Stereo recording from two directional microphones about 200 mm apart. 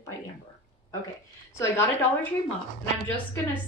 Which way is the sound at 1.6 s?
10° left (ahead or behind).